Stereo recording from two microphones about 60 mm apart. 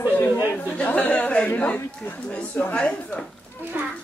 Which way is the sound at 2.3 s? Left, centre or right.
Left.